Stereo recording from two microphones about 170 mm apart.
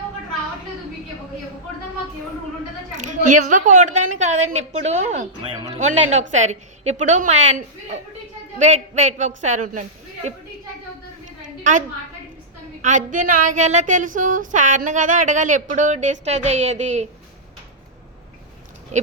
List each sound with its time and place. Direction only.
3.0 s a woman's voice: 45° right (ahead or behind)
12.8 s a woman's voice: 45° right (ahead or behind)